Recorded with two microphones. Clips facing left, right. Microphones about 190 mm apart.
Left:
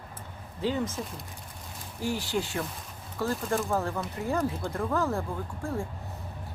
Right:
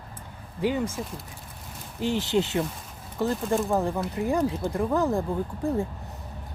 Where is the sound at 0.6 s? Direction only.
15° right (ahead or behind).